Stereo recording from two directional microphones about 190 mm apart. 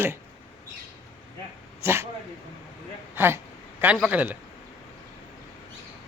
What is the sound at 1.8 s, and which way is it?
Speech, 15° right (ahead or behind).